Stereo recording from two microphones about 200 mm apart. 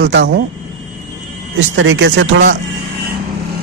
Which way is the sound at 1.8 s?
80° right.